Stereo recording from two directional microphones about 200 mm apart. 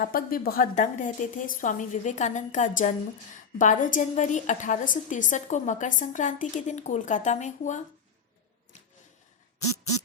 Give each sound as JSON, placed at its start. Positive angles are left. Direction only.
{"t": 0.0, "sound": "a woman's voice", "side_deg": 45}